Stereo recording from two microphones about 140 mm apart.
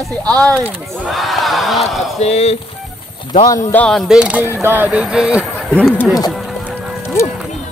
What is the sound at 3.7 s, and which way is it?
Speech, 10° left (ahead or behind).